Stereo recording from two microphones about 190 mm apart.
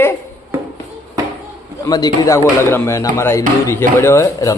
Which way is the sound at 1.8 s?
20° left (ahead or behind).